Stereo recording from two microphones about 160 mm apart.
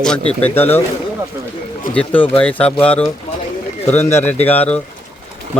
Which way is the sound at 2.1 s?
35° left (ahead or behind).